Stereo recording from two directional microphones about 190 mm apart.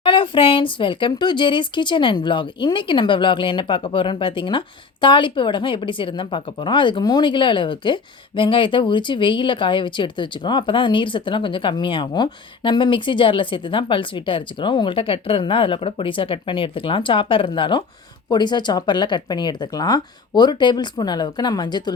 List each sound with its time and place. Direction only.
0.0 s speech: 25° left (ahead or behind)